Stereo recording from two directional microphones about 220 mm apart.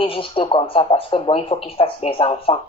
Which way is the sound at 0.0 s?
25° left (ahead or behind).